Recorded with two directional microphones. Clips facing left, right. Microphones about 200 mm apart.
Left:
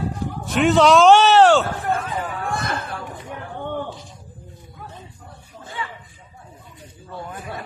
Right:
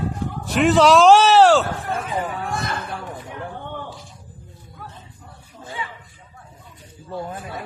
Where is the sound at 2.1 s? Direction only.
20° right (ahead or behind).